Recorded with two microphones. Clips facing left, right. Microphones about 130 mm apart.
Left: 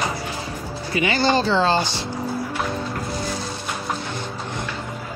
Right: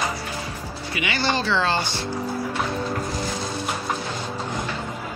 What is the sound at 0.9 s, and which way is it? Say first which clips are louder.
Speech: left 5 dB; 35° left (ahead or behind).